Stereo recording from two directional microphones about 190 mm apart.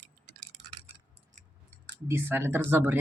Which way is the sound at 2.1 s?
10° right (ahead or behind).